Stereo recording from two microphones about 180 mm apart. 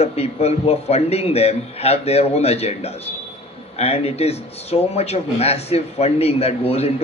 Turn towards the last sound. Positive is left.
turn(degrees=35)  # may be behind; listen again after turning